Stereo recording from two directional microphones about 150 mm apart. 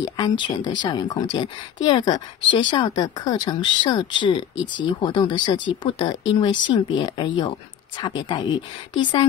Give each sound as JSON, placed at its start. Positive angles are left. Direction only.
{"t": 0.0, "sound": "speech", "side_deg": 30}